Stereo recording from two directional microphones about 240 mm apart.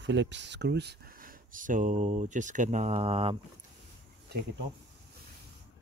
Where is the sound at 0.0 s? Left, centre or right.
Right.